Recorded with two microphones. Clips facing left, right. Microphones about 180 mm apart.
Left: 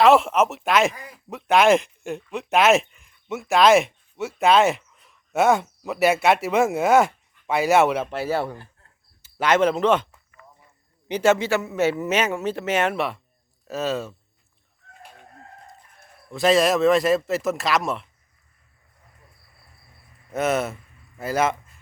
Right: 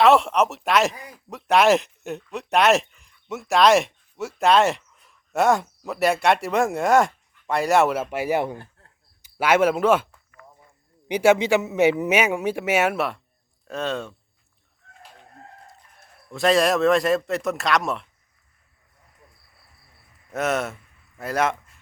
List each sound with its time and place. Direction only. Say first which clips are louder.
0.0 s speech: left 1 dB; centre (ahead or behind)
8.1 s a man's voice: right 1 dB; 15° right (ahead or behind)
11.1 s a man's voice: right 2 dB; 10° right (ahead or behind); by 14.2 s 5° left (ahead or behind)
16.3 s a man's voice: left 1 dB; centre (ahead or behind)
20.3 s a man's voice: left 2 dB; centre (ahead or behind)